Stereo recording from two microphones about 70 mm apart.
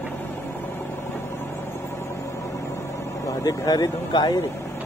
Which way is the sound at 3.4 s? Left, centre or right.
Left.